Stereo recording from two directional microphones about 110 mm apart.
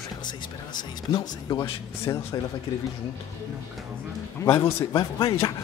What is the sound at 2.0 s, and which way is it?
Speech, 25° left (ahead or behind).